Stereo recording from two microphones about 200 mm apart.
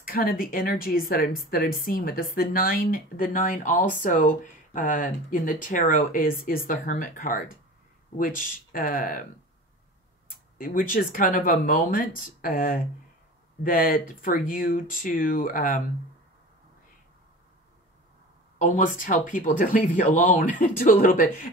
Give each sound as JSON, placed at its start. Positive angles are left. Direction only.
{"t": 0.0, "sound": "speech", "side_deg": 45}
{"t": 10.6, "sound": "speech", "side_deg": 45}
{"t": 18.6, "sound": "speech", "side_deg": 40}